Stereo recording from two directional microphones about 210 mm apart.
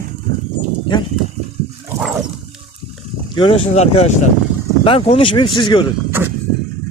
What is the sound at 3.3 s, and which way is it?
Speech, 25° left (ahead or behind).